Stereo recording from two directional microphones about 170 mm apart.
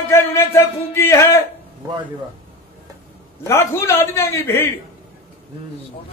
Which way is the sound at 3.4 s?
15° left (ahead or behind).